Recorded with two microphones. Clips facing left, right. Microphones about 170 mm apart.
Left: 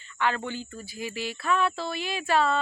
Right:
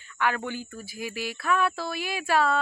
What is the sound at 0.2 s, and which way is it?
Speech, 10° right (ahead or behind).